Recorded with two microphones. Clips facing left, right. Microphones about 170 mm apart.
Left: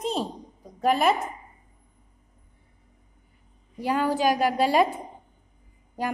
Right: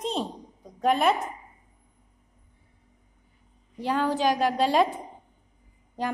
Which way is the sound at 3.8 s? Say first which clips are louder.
Left 1 dB; 10° left (ahead or behind).